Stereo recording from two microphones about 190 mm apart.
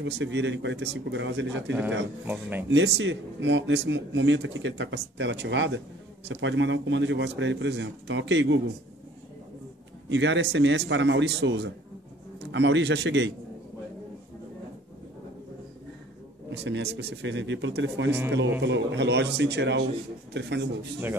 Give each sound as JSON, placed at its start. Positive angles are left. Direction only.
{"t": 0.0, "sound": "speech", "side_deg": -70}
{"t": 1.7, "sound": "speech", "side_deg": -5}
{"t": 2.7, "sound": "speech", "side_deg": -75}
{"t": 10.0, "sound": "speech", "side_deg": -70}
{"t": 16.4, "sound": "a man's voice", "side_deg": -65}